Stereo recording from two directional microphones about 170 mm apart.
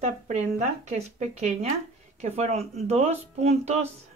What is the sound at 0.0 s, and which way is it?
Speech, 45° right (ahead or behind).